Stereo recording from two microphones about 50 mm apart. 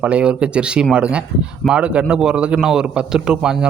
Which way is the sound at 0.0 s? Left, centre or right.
Right.